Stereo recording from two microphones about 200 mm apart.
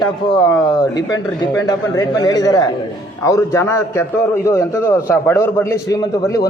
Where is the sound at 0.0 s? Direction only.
20° left (ahead or behind).